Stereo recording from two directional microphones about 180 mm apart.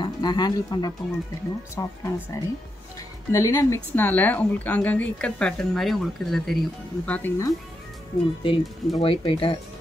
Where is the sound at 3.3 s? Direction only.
15° left (ahead or behind).